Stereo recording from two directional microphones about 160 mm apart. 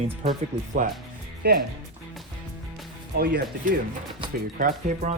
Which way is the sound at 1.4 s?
80° right.